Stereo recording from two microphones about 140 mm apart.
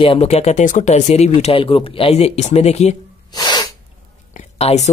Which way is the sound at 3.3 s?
30° left (ahead or behind).